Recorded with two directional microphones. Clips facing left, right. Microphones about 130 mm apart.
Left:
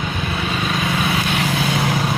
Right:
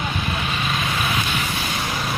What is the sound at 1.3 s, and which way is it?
Vehicle, 90° left.